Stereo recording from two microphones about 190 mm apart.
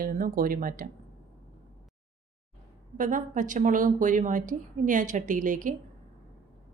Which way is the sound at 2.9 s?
45° right (ahead or behind).